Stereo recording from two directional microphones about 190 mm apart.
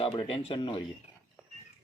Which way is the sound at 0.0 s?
30° left (ahead or behind).